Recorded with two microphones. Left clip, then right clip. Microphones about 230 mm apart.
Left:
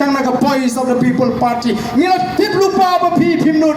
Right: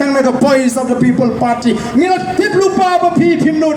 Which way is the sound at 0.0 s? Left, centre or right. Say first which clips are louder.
Right 3 dB; right.